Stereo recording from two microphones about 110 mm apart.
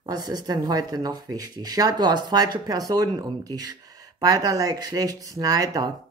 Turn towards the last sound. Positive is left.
turn(degrees=-35)  # may be behind; listen again after turning